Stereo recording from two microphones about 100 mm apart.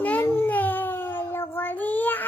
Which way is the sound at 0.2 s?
25° left (ahead or behind).